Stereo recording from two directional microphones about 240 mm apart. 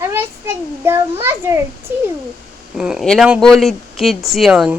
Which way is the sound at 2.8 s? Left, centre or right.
Centre.